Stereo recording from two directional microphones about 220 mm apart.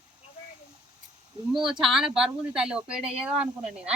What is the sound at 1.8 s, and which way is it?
Speech, centre (ahead or behind).